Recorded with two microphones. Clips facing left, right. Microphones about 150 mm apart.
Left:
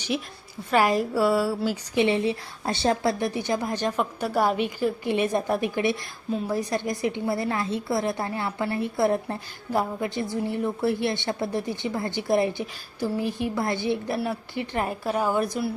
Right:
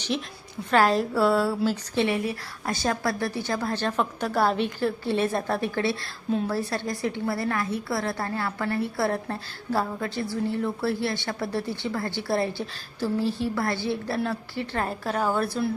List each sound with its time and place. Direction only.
0.7 s a woman's voice: 10° left (ahead or behind)
2.0 s a woman's voice: 25° left (ahead or behind)